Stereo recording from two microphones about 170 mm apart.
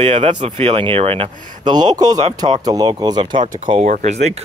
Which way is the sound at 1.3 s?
50° right (ahead or behind).